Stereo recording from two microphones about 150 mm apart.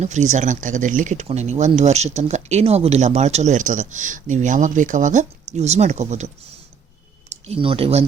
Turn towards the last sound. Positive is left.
turn(degrees=-40)  # may be behind; listen again after turning